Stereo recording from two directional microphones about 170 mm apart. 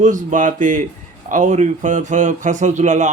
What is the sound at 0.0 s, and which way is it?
Speech, 50° right (ahead or behind).